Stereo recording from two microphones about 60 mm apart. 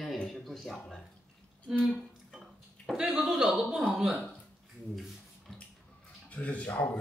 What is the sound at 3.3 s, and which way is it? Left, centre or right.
Speech, centre.